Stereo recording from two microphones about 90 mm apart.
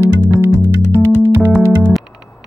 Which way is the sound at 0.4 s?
30° right (ahead or behind).